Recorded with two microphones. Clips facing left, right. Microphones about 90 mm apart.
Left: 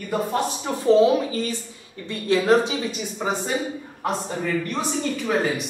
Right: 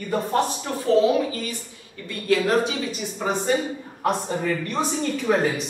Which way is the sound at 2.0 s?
25° left (ahead or behind).